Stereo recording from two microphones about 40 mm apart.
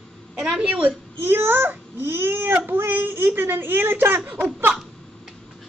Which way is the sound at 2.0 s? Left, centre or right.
Right.